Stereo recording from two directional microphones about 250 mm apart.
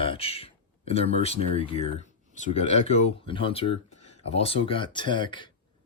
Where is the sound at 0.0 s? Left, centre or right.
Left.